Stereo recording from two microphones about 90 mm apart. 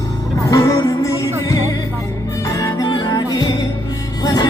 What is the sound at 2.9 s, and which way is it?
Music, 50° left (ahead or behind).